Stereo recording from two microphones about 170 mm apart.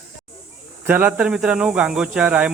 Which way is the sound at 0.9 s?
10° right (ahead or behind).